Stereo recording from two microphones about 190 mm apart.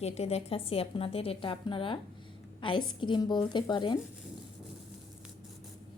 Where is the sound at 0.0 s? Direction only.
35° left (ahead or behind).